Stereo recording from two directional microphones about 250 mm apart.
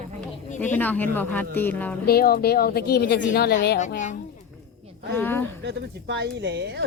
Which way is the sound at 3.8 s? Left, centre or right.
Left.